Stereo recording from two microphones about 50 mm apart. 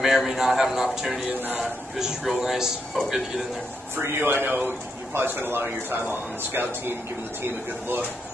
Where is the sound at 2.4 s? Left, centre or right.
Centre.